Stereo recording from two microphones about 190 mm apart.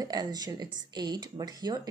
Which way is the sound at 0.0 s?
20° right (ahead or behind).